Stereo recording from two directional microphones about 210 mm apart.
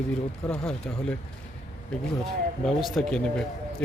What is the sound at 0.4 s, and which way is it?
Speech, 5° left (ahead or behind).